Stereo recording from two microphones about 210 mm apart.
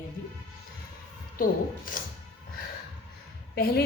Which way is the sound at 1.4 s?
40° left (ahead or behind).